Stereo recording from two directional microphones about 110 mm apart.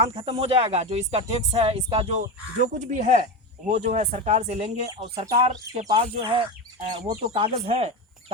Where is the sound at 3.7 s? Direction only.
80° right.